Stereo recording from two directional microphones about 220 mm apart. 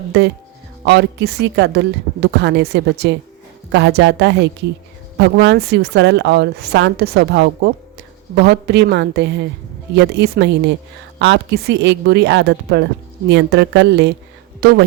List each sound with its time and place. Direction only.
0.1 s a woman's voice: 50° right (ahead or behind)